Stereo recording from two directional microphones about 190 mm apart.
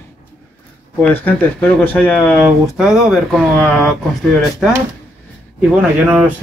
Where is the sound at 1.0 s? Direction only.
10° left (ahead or behind).